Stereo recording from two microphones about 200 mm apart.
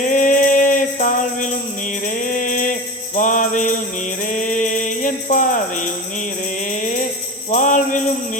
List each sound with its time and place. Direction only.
0.0 s music: 40° left (ahead or behind)
7.5 s music: 40° left (ahead or behind)